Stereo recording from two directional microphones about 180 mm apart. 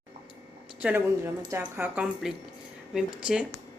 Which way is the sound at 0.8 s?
10° right (ahead or behind).